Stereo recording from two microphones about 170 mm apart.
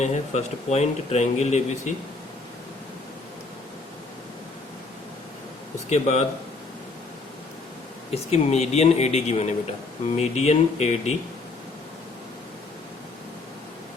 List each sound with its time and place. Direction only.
0.0 s speech: 40° left (ahead or behind)
5.9 s speech: 40° left (ahead or behind)
8.1 s speech: 40° left (ahead or behind)